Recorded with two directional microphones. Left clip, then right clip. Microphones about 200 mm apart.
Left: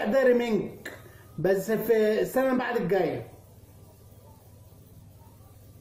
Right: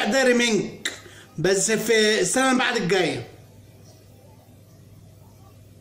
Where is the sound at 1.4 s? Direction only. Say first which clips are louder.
Right 4 dB; 10° right (ahead or behind).